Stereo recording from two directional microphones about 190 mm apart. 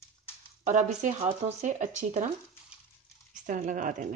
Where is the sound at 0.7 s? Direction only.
40° right (ahead or behind).